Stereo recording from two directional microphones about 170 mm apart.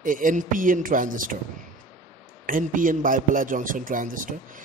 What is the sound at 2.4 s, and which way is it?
A man's voice, 50° right (ahead or behind).